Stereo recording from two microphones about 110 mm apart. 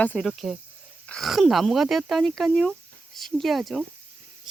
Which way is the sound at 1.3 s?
Centre (ahead or behind).